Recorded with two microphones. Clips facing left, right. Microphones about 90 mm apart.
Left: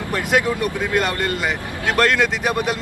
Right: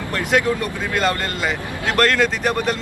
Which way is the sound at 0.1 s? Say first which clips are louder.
Even; 15° left (ahead or behind).